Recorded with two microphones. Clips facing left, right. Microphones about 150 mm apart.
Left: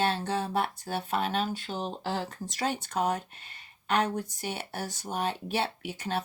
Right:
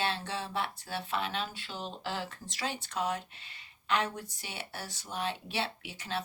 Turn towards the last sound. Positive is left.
turn(degrees=50)  # may be behind; listen again after turning